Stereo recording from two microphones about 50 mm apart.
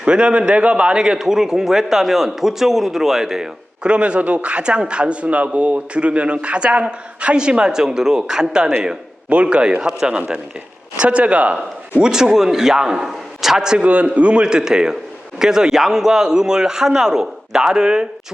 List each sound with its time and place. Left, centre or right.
0.0 s a man's voice: centre
3.8 s a man's voice: right
11.5 s a man's voice: centre
13.8 s a man's voice: right